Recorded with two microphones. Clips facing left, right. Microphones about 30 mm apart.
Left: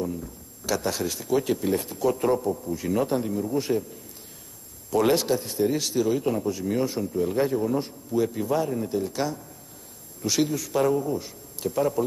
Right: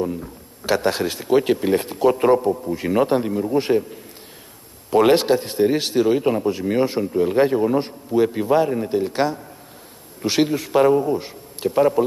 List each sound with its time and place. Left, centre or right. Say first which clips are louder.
0.0 s a man's voice: right 6 dB; right